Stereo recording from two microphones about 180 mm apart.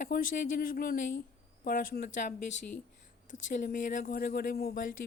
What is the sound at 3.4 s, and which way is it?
Speech, 45° left (ahead or behind).